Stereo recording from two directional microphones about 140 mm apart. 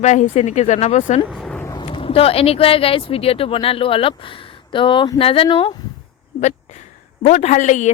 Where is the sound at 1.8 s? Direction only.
40° left (ahead or behind).